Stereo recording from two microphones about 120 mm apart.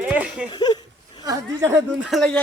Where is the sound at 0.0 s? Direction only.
10° right (ahead or behind).